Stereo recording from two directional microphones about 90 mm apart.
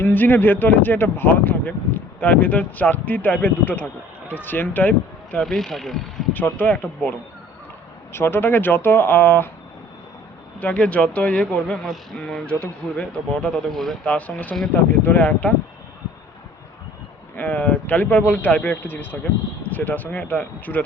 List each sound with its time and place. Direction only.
0.0 s speech: 20° left (ahead or behind)
5.4 s speech: 5° left (ahead or behind)
6.3 s speech: 20° left (ahead or behind)
8.1 s speech: 25° left (ahead or behind)
10.6 s speech: 15° left (ahead or behind)
17.3 s speech: 15° left (ahead or behind)